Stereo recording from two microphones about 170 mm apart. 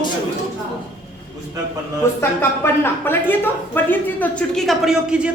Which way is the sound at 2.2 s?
15° left (ahead or behind).